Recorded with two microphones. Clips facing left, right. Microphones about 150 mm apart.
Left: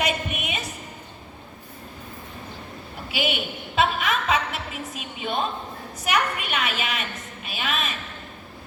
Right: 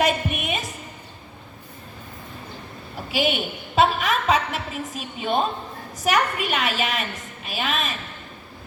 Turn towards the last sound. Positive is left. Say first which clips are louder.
# right 2 dB
turn(degrees=-40)  # may be behind; listen again after turning